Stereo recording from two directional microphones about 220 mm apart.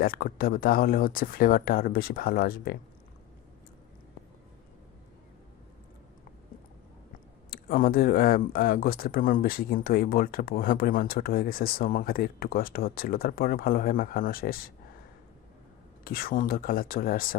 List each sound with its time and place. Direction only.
0.0 s speech: 40° left (ahead or behind)
7.5 s speech: 40° left (ahead or behind)
16.0 s speech: 40° left (ahead or behind)